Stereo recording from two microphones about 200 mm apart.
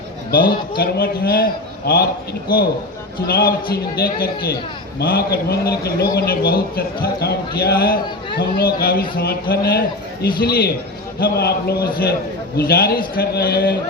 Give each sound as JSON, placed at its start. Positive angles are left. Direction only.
{"t": 0.3, "sound": "a man's voice", "side_deg": 50}
{"t": 3.2, "sound": "a man's voice", "side_deg": 50}